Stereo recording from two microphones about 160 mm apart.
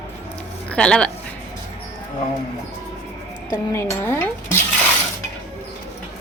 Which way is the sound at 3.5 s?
15° left (ahead or behind).